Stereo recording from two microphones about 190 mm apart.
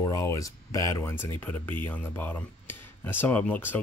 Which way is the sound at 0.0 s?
15° left (ahead or behind).